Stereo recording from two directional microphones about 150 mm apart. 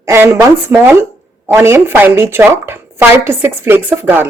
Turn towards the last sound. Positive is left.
turn(degrees=-15)  # may be behind; listen again after turning